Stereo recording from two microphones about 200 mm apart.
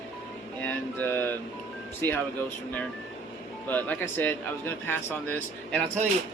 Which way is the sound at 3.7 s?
10° left (ahead or behind).